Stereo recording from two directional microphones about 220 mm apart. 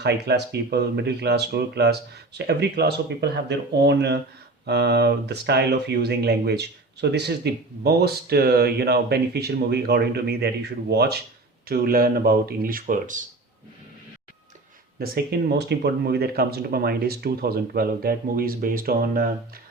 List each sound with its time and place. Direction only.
0.0 s speech: 50° right (ahead or behind)
14.9 s speech: 45° right (ahead or behind)